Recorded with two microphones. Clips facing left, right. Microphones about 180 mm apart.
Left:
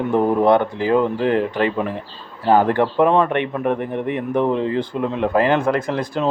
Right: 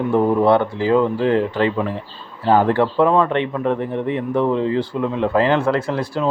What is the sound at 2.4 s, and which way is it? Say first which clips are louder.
A man's voice: even; 15° left (ahead or behind).